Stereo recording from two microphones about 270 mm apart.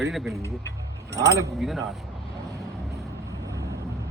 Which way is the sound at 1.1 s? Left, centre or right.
Centre.